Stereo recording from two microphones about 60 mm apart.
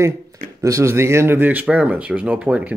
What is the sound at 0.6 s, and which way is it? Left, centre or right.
Speech, right.